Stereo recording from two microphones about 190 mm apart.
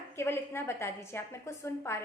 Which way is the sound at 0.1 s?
15° left (ahead or behind).